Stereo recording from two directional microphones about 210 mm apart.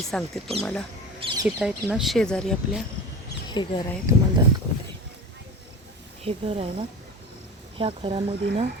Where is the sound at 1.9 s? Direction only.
Centre (ahead or behind).